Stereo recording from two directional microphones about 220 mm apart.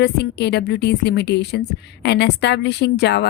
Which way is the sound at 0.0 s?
50° left (ahead or behind).